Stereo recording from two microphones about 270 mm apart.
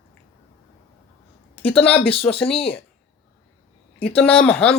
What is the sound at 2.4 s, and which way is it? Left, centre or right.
Speech, left.